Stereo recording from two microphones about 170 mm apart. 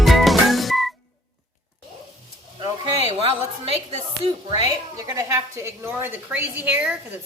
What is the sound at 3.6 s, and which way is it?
Speech, 35° right (ahead or behind).